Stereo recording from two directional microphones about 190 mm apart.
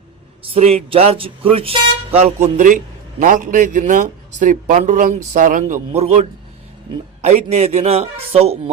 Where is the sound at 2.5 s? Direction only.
45° right (ahead or behind).